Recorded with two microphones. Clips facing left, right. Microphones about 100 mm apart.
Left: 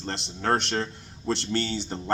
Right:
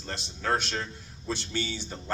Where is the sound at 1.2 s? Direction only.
70° left (ahead or behind).